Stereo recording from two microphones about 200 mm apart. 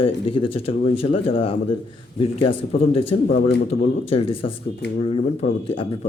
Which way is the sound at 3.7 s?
30° left (ahead or behind).